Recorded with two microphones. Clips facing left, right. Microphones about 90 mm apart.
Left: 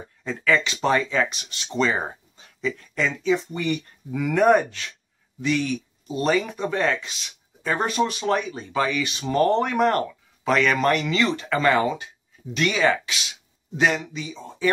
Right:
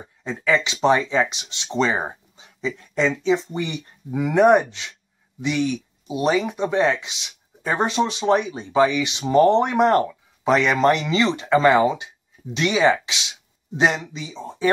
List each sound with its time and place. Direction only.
0.2 s speech: 20° right (ahead or behind)